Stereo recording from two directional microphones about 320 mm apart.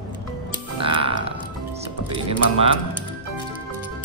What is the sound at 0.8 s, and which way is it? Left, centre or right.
Music, centre.